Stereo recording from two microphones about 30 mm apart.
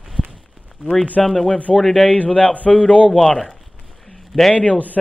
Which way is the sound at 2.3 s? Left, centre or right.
Left.